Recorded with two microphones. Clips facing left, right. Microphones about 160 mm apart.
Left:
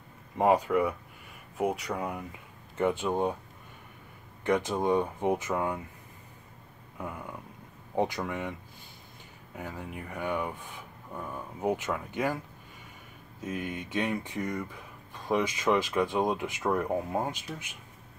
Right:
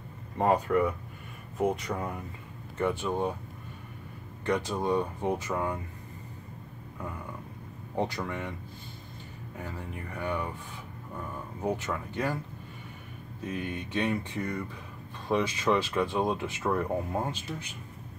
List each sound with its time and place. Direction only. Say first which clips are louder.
0.4 s speech: left 1 dB; 10° left (ahead or behind)
4.5 s speech: left 2 dB; 15° left (ahead or behind)
7.0 s a sound: left 1 dB; 15° left (ahead or behind)
7.9 s speech: left 2 dB; 15° left (ahead or behind)
9.6 s speech: left 1 dB; 15° left (ahead or behind)
13.6 s speech: right 1 dB; 15° left (ahead or behind)